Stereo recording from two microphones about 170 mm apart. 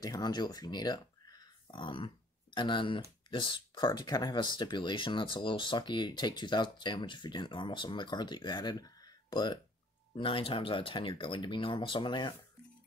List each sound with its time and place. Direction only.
0.0 s speech: 25° left (ahead or behind)